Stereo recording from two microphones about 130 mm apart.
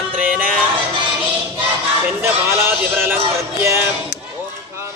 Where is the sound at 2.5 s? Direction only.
15° right (ahead or behind).